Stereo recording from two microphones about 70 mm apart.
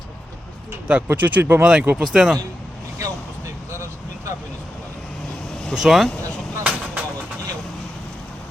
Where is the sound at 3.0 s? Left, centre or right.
Right.